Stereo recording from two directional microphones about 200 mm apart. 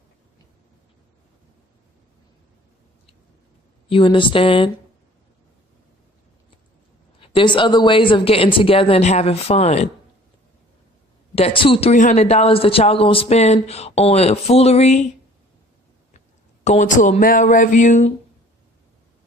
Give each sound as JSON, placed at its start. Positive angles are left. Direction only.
{"t": 3.8, "sound": "speech", "side_deg": 25}
{"t": 7.2, "sound": "speech", "side_deg": 25}
{"t": 11.3, "sound": "speech", "side_deg": 30}
{"t": 16.6, "sound": "speech", "side_deg": 40}